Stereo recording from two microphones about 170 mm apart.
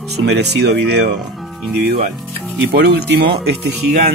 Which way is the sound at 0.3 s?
80° right.